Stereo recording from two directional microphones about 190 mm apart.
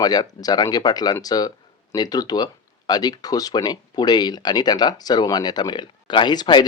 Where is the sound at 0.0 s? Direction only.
20° left (ahead or behind).